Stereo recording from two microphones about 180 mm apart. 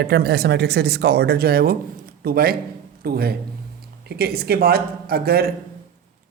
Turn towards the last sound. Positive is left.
turn(degrees=-60)  # may be behind; listen again after turning